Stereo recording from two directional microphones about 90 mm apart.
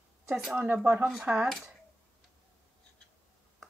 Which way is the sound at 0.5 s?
20° right (ahead or behind).